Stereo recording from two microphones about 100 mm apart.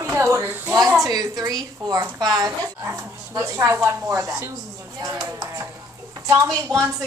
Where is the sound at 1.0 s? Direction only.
40° right (ahead or behind).